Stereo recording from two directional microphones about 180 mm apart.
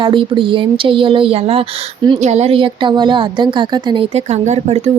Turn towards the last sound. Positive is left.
turn(degrees=-35)  # may be behind; listen again after turning